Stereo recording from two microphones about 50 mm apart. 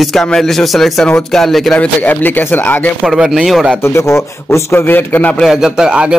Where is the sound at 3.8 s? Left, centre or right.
Left.